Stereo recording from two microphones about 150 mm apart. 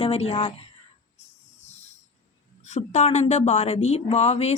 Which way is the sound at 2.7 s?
50° left (ahead or behind).